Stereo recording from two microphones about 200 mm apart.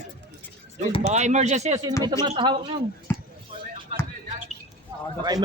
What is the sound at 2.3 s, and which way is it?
Speech, 25° right (ahead or behind).